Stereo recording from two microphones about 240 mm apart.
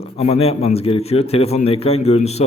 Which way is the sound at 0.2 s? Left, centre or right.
Left.